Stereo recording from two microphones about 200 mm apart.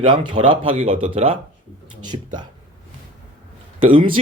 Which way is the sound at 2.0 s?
20° right (ahead or behind).